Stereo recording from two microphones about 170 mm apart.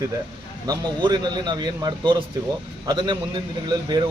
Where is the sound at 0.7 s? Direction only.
25° right (ahead or behind).